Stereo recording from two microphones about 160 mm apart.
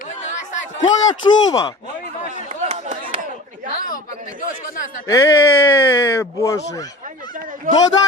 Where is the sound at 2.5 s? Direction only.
45° right (ahead or behind).